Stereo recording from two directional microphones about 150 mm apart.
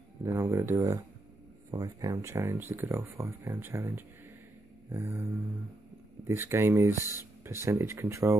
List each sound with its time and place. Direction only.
0.2 s speech: 20° right (ahead or behind)
4.8 s a sound: 15° right (ahead or behind)
6.2 s speech: 15° right (ahead or behind)